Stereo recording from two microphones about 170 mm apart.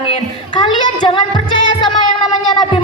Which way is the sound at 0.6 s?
25° left (ahead or behind).